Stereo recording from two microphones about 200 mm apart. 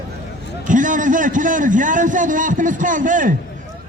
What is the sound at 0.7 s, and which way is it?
A man's voice, 40° right (ahead or behind).